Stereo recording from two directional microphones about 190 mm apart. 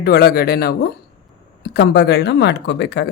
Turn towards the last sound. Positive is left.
turn(degrees=65)  # may be behind; listen again after turning